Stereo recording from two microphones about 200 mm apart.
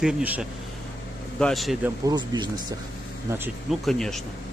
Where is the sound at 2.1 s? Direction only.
20° right (ahead or behind).